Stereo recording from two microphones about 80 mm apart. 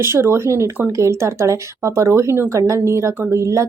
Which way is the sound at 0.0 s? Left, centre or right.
Right.